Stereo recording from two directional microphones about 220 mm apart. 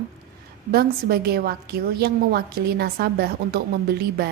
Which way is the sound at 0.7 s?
45° right (ahead or behind).